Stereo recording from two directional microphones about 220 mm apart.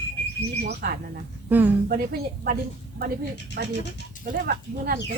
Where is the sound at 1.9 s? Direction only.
40° right (ahead or behind).